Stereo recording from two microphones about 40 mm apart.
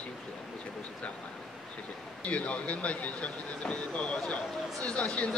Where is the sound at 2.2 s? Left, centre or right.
Left.